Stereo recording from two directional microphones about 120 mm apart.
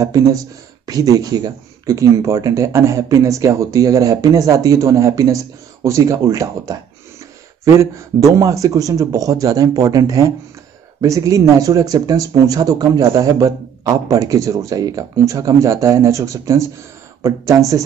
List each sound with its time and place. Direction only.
0.0 s speech: 25° right (ahead or behind)